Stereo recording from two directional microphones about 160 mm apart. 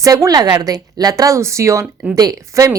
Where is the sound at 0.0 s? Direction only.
20° right (ahead or behind).